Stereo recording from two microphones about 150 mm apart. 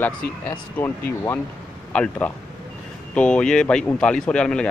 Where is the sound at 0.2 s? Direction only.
90° left.